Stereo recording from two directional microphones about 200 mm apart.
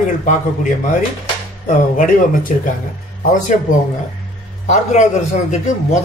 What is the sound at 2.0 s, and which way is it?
Speech, 45° left (ahead or behind).